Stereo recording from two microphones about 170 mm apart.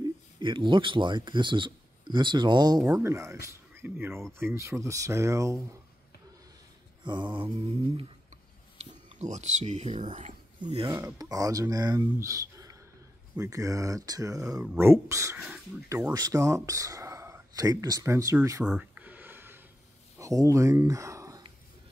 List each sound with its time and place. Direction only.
0.4 s speech: 30° right (ahead or behind)
7.1 s speech: 25° right (ahead or behind)
8.7 s speech: 40° right (ahead or behind)
10.6 s speech: 35° right (ahead or behind)
10.9 s speech: 20° right (ahead or behind)
18.7 s a sound: 10° right (ahead or behind)
20.2 s speech: 20° right (ahead or behind)